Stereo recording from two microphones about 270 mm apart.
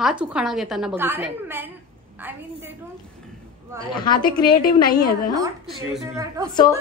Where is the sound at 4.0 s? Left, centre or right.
Centre.